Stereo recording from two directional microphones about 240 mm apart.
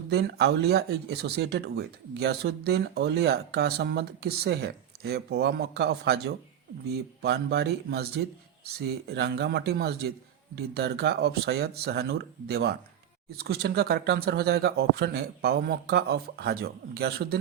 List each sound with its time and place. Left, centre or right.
0.1 s speech: right